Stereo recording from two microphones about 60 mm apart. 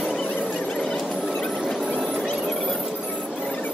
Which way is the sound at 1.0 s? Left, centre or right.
Centre.